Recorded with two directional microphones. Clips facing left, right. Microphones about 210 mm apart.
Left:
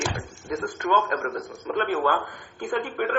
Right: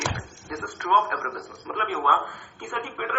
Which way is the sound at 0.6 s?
25° left (ahead or behind).